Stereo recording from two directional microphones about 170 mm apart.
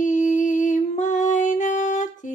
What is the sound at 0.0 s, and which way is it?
Music, 45° left (ahead or behind).